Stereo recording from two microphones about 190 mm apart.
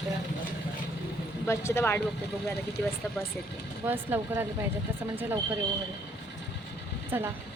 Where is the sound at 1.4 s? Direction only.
15° left (ahead or behind).